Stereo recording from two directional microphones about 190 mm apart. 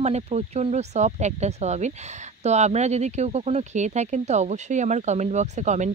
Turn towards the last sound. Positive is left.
turn(degrees=-40)  # may be behind; listen again after turning